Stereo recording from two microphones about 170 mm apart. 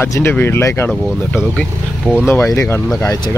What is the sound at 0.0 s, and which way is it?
Speech, 15° left (ahead or behind).